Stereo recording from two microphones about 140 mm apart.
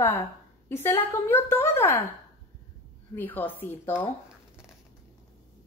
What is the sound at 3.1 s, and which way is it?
Speech, 15° left (ahead or behind).